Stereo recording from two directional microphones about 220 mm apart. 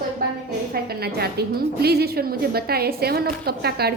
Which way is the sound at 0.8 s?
45° right (ahead or behind).